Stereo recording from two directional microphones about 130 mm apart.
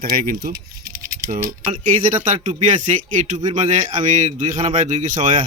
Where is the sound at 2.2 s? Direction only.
70° right (ahead or behind).